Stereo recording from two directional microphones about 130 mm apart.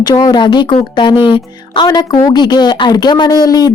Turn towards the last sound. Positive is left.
turn(degrees=30)  # may be behind; listen again after turning